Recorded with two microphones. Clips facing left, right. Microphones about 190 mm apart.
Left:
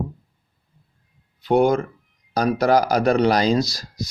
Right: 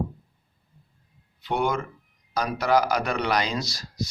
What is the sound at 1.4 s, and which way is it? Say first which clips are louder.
Speech: left 9 dB; 40° left (ahead or behind).